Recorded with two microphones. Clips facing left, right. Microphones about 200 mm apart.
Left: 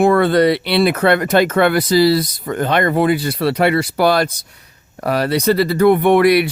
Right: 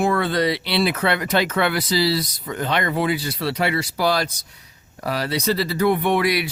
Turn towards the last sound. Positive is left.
turn(degrees=55)  # may be behind; listen again after turning